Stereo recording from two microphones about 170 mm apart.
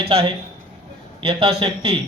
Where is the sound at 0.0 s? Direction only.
35° right (ahead or behind).